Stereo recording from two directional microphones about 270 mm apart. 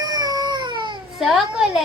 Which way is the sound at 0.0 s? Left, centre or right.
Centre.